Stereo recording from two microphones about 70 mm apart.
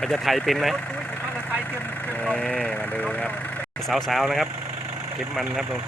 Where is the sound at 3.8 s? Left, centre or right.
Centre.